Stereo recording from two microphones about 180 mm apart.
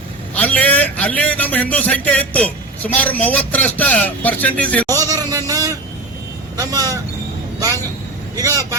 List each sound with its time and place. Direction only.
0.3 s a man's voice: 10° left (ahead or behind)
4.9 s a sound: 20° right (ahead or behind)
6.6 s speech: 20° right (ahead or behind)
8.4 s speech: 20° right (ahead or behind)